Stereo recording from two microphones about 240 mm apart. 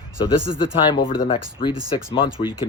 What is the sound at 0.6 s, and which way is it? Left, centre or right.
Speech, left.